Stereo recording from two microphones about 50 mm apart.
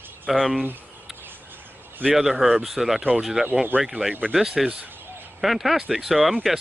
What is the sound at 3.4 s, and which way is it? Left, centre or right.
Speech, right.